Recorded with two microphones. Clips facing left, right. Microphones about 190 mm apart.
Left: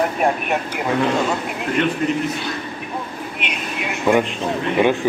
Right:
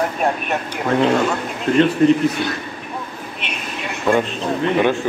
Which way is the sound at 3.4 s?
15° left (ahead or behind).